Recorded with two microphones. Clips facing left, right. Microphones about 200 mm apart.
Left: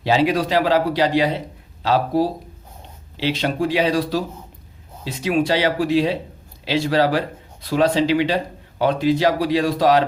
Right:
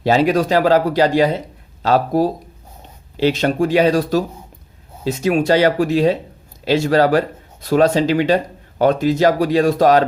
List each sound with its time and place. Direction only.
0.0 s speech: 45° right (ahead or behind)